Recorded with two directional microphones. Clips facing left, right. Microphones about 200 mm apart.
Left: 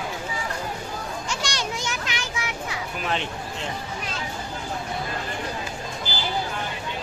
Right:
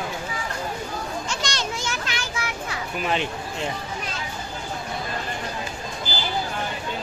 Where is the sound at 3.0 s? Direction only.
5° right (ahead or behind).